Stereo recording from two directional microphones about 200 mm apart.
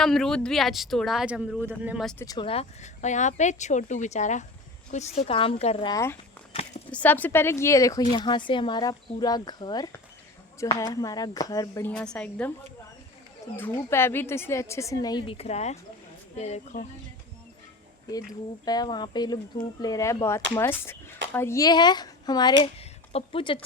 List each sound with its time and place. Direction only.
0.0 s speech: centre (ahead or behind)
2.2 s speech: 20° left (ahead or behind)
5.9 s speech: 15° left (ahead or behind)
6.5 s a sound: 30° left (ahead or behind)
6.9 s speech: 10° left (ahead or behind)
13.6 s speech: 10° left (ahead or behind); by 16.8 s 35° left (ahead or behind)
18.6 s speech: 20° left (ahead or behind)